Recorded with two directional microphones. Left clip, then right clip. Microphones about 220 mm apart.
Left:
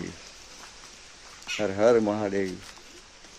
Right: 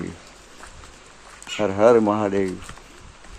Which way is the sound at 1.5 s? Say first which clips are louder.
Right 6 dB; centre (ahead or behind).